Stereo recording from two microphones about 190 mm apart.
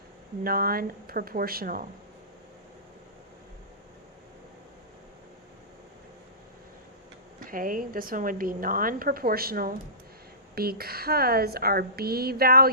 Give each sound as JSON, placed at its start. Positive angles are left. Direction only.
{"t": 0.4, "sound": "a woman's voice", "side_deg": -50}
{"t": 7.4, "sound": "a woman's voice", "side_deg": -45}